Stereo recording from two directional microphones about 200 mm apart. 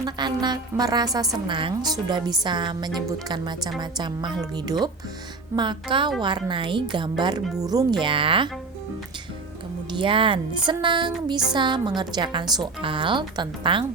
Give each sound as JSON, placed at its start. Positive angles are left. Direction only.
{"t": 0.0, "sound": "a woman's voice", "side_deg": -20}
{"t": 10.0, "sound": "a woman's voice", "side_deg": -25}